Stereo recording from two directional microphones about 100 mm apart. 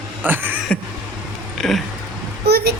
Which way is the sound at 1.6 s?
Centre (ahead or behind).